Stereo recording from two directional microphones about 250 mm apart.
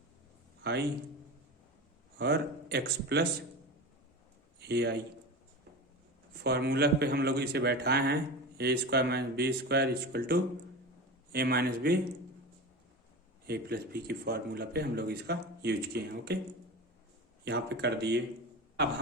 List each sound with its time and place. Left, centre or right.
0.6 s a man's voice: right
2.1 s a man's voice: right
4.6 s a man's voice: right
6.4 s a man's voice: right
13.5 s a man's voice: right
17.4 s speech: right